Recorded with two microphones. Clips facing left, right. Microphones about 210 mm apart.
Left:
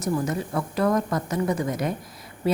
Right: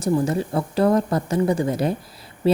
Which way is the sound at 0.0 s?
30° right (ahead or behind).